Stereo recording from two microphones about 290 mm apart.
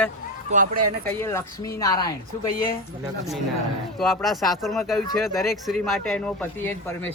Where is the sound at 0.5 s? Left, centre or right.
Right.